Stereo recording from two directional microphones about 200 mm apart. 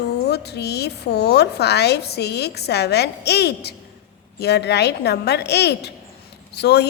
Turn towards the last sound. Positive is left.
turn(degrees=55)  # may be behind; listen again after turning